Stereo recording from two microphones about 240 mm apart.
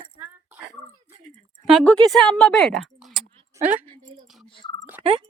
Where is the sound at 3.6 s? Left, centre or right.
Right.